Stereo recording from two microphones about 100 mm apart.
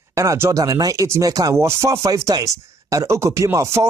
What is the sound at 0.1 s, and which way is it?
Speech, 30° right (ahead or behind).